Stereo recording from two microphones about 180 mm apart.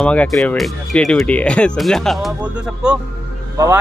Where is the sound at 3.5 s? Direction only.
20° right (ahead or behind).